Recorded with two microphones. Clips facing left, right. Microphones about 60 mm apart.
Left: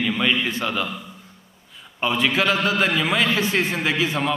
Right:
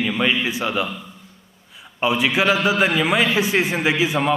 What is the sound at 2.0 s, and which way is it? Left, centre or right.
A man's voice, centre.